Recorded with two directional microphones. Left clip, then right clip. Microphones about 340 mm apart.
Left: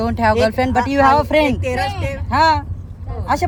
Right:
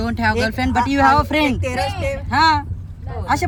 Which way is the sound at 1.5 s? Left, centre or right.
Centre.